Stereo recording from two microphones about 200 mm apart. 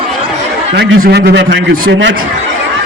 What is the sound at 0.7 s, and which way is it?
A man's voice, 55° right (ahead or behind).